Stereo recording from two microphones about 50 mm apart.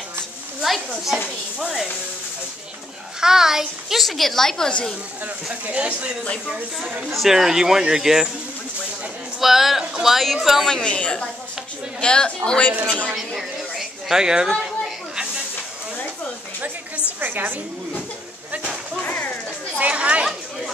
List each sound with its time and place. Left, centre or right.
0.6 s a sound: centre
3.2 s a woman's voice: centre
5.2 s speech: right
6.5 s speech: centre
9.4 s a woman's voice: centre
10.7 s a woman's voice: left
13.1 s a woman's voice: centre
17.2 s a sound: right
19.8 s chatter: right
20.2 s chatter: centre